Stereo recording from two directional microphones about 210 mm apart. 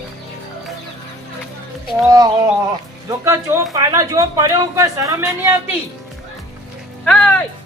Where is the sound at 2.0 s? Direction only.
15° right (ahead or behind).